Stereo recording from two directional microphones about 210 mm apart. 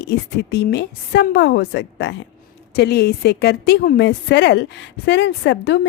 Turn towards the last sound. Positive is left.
turn(degrees=60)  # may be behind; listen again after turning